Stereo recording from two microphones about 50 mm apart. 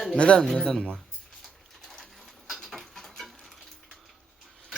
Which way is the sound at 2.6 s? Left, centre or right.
Centre.